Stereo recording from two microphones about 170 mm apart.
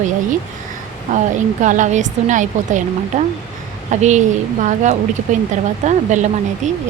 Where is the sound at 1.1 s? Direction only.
45° right (ahead or behind).